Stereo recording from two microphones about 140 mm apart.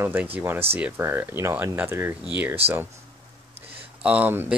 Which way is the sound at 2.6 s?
45° right (ahead or behind).